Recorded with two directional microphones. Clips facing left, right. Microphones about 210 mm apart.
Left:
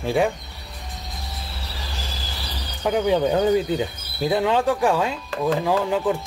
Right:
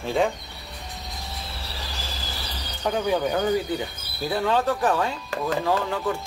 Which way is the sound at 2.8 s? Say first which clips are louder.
Left 4 dB; 15° left (ahead or behind).